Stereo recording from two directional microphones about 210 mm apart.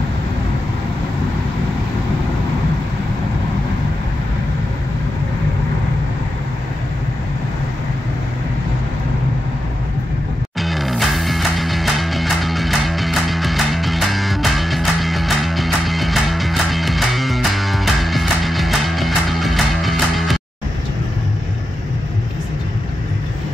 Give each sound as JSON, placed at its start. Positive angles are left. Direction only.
{"t": 10.6, "sound": "music", "side_deg": 0}